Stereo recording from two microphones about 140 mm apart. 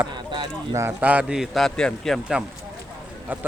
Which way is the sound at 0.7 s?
15° right (ahead or behind).